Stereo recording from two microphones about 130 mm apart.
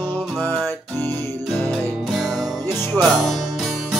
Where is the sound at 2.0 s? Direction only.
Centre (ahead or behind).